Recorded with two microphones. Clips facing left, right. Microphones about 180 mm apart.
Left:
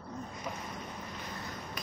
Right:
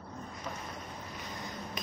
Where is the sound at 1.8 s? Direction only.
20° right (ahead or behind).